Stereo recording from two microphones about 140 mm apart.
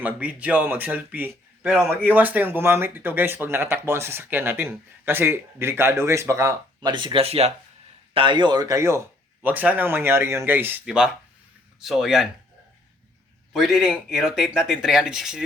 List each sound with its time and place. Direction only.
0.0 s speech: 10° right (ahead or behind)
6.9 s speech: 35° right (ahead or behind); by 12.3 s 5° right (ahead or behind)
13.5 s speech: centre (ahead or behind)